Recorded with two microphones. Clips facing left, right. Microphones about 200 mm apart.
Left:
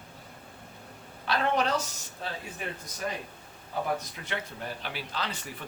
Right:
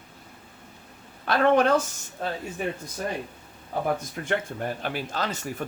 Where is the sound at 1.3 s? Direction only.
55° right (ahead or behind).